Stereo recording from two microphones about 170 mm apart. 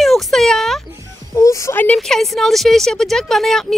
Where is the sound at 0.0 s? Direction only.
Centre (ahead or behind).